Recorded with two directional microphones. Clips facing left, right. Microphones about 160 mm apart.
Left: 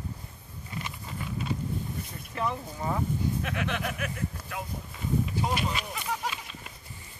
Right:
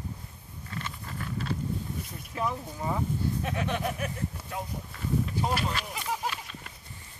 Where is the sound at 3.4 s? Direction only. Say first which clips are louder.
Right 1 dB; 30° right (ahead or behind).